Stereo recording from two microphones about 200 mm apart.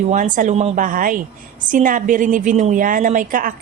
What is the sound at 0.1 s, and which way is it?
A woman's voice, 40° right (ahead or behind).